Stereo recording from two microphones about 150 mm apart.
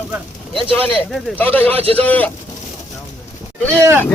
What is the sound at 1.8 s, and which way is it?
Speech, 40° right (ahead or behind).